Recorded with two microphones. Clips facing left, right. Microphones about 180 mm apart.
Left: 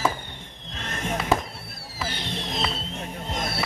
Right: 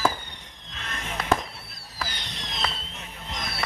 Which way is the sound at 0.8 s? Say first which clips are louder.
Left 5 dB; 45° left (ahead or behind).